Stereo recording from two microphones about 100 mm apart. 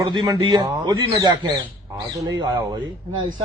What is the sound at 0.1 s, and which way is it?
Speech, 50° right (ahead or behind).